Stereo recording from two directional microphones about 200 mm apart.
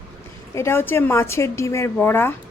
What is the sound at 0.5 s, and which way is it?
A woman's voice, 10° left (ahead or behind).